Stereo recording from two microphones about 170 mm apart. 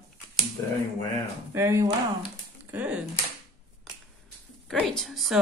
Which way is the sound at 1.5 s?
15° right (ahead or behind).